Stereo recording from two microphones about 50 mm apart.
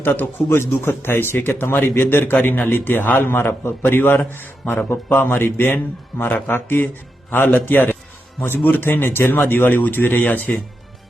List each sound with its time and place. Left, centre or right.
0.0 s a man's voice: left